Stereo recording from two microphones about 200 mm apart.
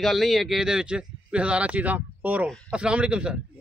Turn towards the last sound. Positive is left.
turn(degrees=-5)  # may be behind; listen again after turning